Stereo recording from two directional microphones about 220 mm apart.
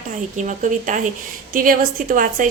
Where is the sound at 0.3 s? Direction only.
35° right (ahead or behind).